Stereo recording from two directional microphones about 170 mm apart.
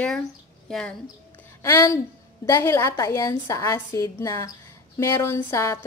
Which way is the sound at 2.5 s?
15° left (ahead or behind).